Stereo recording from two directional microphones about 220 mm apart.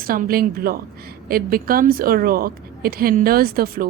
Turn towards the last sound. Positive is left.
turn(degrees=-45)  # may be behind; listen again after turning